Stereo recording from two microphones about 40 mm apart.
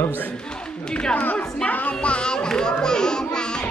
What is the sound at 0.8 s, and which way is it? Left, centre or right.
Speech, left.